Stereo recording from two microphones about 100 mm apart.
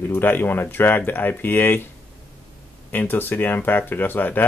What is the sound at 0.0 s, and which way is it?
Speech, 20° left (ahead or behind).